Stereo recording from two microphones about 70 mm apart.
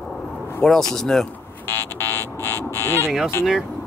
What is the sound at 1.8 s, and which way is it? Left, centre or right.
Music, left.